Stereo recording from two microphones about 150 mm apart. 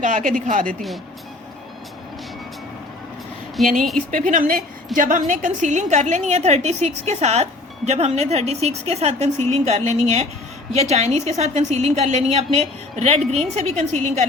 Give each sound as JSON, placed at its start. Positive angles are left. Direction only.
{"t": 0.0, "sound": "speech", "side_deg": -60}
{"t": 3.6, "sound": "speech", "side_deg": 0}
{"t": 4.3, "sound": "a woman's voice", "side_deg": -65}